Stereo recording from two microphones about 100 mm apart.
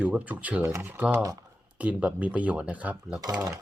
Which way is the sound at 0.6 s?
25° right (ahead or behind).